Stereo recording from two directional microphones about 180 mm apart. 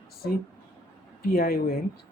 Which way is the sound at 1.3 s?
55° left (ahead or behind).